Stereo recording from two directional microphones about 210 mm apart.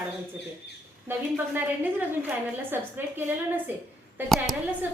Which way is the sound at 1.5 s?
10° right (ahead or behind).